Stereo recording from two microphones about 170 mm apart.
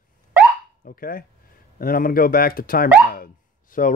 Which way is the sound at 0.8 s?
55° left (ahead or behind).